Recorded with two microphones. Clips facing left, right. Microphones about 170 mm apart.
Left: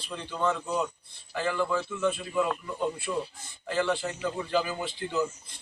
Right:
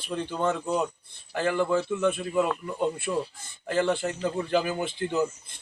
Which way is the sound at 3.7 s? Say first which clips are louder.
Right 3 dB; 50° right (ahead or behind).